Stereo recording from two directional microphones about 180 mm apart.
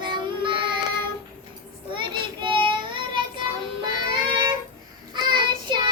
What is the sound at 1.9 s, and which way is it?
Child singing, 25° right (ahead or behind).